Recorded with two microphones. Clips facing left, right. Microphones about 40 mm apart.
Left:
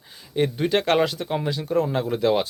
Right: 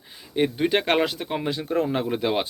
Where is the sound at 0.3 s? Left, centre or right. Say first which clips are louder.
Even; centre.